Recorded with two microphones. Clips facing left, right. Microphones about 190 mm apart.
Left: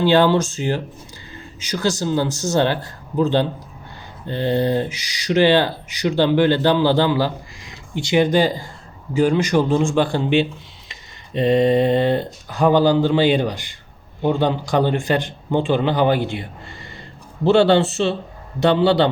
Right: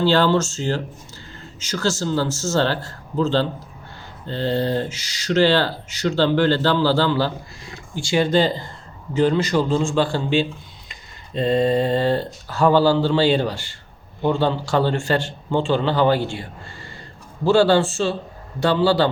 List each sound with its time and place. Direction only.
0.0 s speech: 15° left (ahead or behind)
17.5 s speech: 20° left (ahead or behind)